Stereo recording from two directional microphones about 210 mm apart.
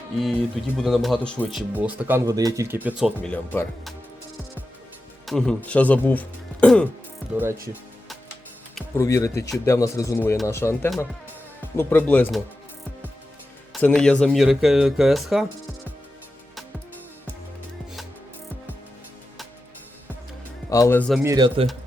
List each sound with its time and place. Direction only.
0.2 s speech: centre (ahead or behind)
3.2 s speech: 10° left (ahead or behind)
5.2 s speech: centre (ahead or behind)
7.7 s music: centre (ahead or behind)
9.0 s speech: 15° left (ahead or behind)
11.8 s speech: 10° left (ahead or behind)
13.7 s speech: 5° left (ahead or behind)
20.7 s speech: 15° left (ahead or behind)
21.1 s speech: 10° right (ahead or behind)
21.3 s speech: 20° right (ahead or behind)